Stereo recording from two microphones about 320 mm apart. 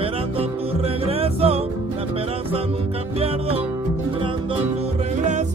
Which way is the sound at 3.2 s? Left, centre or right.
Centre.